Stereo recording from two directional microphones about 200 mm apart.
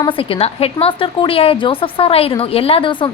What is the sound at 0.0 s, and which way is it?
A woman's voice, 25° left (ahead or behind).